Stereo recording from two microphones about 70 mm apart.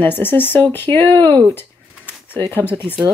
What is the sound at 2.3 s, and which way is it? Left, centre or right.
Speech, left.